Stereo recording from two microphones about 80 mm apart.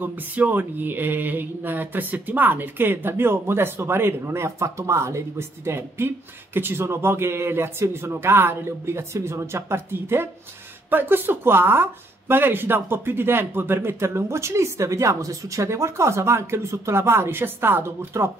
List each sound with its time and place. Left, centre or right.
0.0 s speech: right